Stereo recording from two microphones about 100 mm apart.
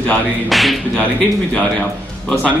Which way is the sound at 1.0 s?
15° left (ahead or behind).